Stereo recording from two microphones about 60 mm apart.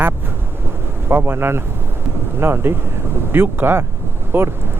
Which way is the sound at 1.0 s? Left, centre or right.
Right.